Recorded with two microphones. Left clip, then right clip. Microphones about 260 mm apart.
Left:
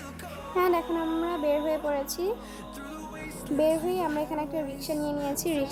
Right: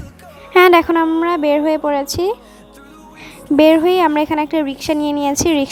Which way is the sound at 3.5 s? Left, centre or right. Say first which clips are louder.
Right 15 dB; right.